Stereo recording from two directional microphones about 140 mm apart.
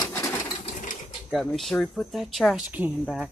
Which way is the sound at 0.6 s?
60° left (ahead or behind).